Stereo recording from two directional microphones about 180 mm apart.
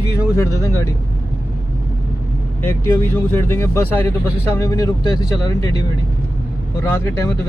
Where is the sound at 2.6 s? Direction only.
15° left (ahead or behind).